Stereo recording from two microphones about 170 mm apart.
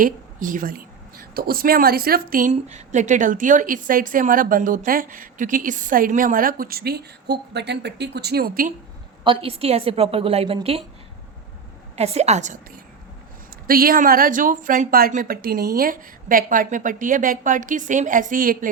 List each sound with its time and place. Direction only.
0.0 s a woman's voice: 50° right (ahead or behind)
9.2 s a woman's voice: 30° right (ahead or behind)
11.9 s a woman's voice: 40° right (ahead or behind)
13.7 s a woman's voice: 60° right (ahead or behind)